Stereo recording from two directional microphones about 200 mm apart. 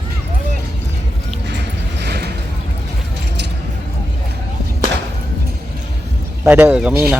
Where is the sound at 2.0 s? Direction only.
55° right (ahead or behind).